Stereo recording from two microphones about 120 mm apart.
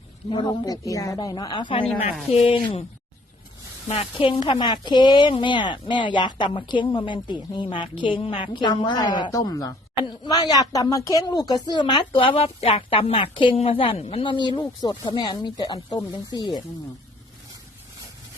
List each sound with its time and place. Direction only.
0.3 s a woman's voice: 40° left (ahead or behind)
3.8 s a woman's voice: 55° left (ahead or behind); by 16.6 s 35° left (ahead or behind)